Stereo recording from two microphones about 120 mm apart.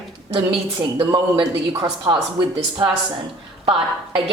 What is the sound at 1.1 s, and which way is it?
A woman's voice, 40° right (ahead or behind).